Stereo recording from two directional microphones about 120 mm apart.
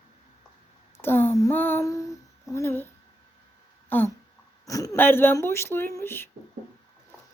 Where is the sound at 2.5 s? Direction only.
20° left (ahead or behind).